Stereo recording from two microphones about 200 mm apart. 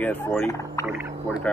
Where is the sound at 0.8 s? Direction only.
5° right (ahead or behind).